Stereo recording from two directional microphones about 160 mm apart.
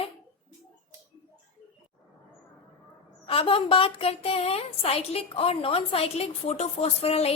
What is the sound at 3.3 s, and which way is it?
A woman's voice, 35° left (ahead or behind).